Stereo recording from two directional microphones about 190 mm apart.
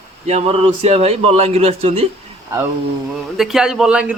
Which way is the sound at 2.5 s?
15° right (ahead or behind).